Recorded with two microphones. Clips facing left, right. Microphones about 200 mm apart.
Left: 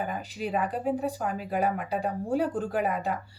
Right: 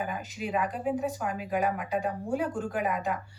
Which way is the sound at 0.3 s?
35° left (ahead or behind).